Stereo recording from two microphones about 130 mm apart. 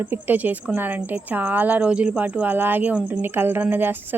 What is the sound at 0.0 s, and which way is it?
A woman's voice, 15° right (ahead or behind).